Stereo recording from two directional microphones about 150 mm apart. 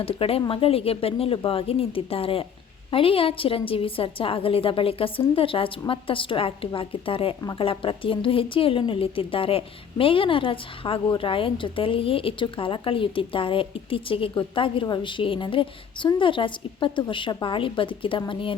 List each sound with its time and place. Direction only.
0.0 s a woman's voice: 40° left (ahead or behind)